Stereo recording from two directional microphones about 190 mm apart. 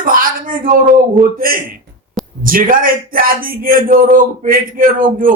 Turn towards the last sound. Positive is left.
turn(degrees=-45)  # may be behind; listen again after turning